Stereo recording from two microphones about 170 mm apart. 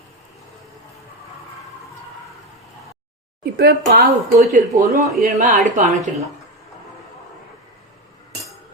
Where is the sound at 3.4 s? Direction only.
70° right (ahead or behind).